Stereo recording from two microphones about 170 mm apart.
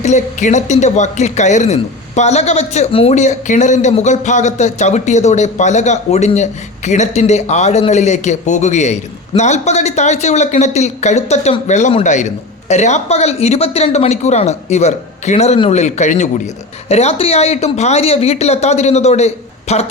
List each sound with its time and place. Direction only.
0.0 s speech: 45° left (ahead or behind)